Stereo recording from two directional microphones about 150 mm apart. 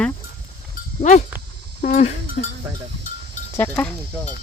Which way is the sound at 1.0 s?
55° left (ahead or behind).